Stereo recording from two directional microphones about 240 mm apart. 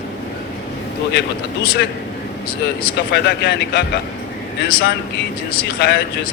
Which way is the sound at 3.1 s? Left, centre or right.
Left.